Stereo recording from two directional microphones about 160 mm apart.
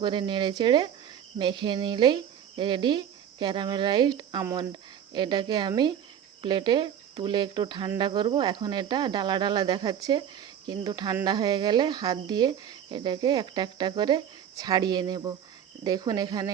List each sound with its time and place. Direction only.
0.0 s speech: 30° right (ahead or behind)